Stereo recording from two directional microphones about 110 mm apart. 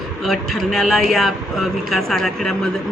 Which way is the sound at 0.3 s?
Centre (ahead or behind).